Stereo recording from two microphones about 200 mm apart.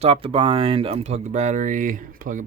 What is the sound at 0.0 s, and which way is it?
Speech, 30° right (ahead or behind).